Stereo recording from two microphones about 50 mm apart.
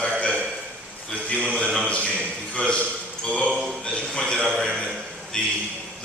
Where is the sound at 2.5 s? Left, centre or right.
Left.